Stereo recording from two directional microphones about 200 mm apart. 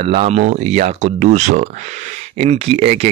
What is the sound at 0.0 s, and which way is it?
Speech, 30° right (ahead or behind).